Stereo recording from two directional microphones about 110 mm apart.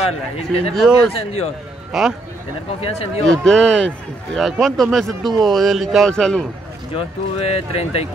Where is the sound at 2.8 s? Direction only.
65° left (ahead or behind).